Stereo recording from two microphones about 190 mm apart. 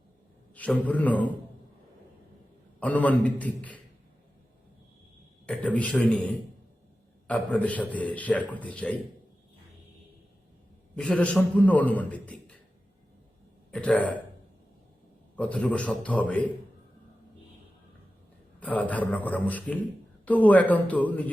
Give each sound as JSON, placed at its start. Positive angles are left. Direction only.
{"t": 0.5, "sound": "a man's voice", "side_deg": 5}
{"t": 2.8, "sound": "a man's voice", "side_deg": 10}
{"t": 5.5, "sound": "a man's voice", "side_deg": 5}
{"t": 10.9, "sound": "a man's voice", "side_deg": 5}
{"t": 13.7, "sound": "speech", "side_deg": 5}
{"t": 15.4, "sound": "a man's voice", "side_deg": 5}
{"t": 18.6, "sound": "a man's voice", "side_deg": 10}